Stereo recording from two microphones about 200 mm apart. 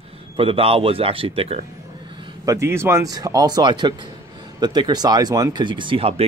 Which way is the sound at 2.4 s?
15° right (ahead or behind).